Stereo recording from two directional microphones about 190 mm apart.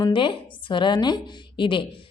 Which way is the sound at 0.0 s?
25° left (ahead or behind).